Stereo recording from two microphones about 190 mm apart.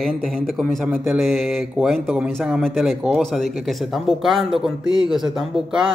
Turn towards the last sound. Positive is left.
turn(degrees=0)  # may be behind; listen again after turning